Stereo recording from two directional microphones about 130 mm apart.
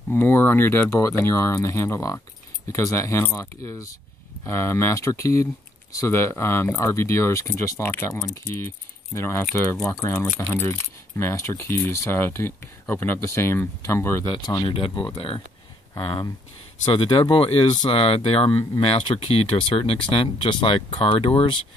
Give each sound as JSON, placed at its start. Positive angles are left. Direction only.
{"t": 0.1, "sound": "speech", "side_deg": 15}
{"t": 14.2, "sound": "speech", "side_deg": 35}